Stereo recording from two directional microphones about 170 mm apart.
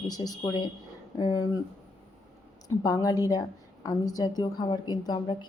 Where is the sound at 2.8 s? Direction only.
20° left (ahead or behind).